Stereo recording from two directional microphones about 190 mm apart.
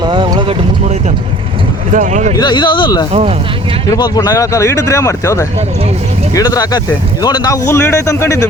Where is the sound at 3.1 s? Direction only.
30° right (ahead or behind).